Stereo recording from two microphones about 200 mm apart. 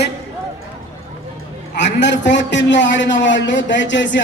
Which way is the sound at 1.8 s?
60° left (ahead or behind).